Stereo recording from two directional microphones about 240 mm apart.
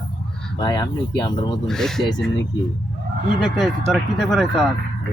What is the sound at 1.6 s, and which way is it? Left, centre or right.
Speech, centre.